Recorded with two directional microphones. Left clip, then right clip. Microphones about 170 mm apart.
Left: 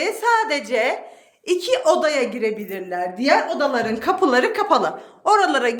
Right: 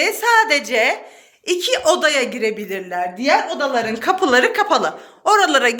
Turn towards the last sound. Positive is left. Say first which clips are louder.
# right 3 dB
turn(degrees=0)  # may be behind; listen again after turning